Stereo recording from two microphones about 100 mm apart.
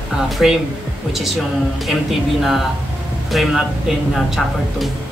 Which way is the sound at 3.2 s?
Centre (ahead or behind).